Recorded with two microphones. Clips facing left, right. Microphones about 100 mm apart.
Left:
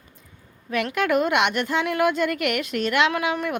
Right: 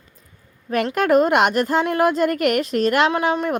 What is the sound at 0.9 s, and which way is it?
A woman's voice, 40° right (ahead or behind).